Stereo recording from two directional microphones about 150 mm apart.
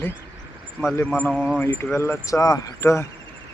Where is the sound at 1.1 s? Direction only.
5° left (ahead or behind).